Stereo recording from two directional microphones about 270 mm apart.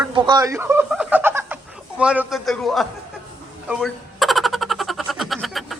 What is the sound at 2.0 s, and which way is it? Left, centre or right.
Speech, centre.